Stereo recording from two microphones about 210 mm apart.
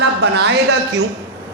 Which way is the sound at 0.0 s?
55° right (ahead or behind).